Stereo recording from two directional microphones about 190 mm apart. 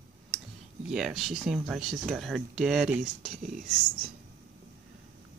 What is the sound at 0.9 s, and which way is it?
Speech, centre (ahead or behind).